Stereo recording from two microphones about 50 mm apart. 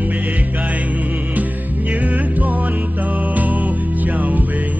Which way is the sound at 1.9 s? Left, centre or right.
Right.